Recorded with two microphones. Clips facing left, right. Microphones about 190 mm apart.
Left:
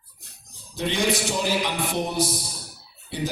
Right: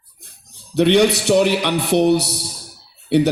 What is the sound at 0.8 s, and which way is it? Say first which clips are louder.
A man's voice: right 10 dB; 70° right (ahead or behind).